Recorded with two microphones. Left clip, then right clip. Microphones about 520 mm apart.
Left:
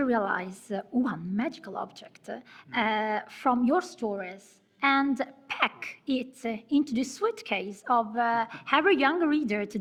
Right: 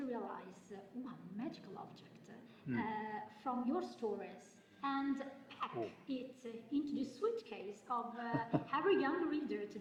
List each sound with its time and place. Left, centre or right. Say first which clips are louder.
0.1 s a woman's voice: left 18 dB; left